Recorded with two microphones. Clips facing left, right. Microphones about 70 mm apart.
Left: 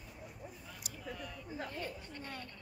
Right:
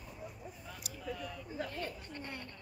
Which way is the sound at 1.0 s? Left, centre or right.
Centre.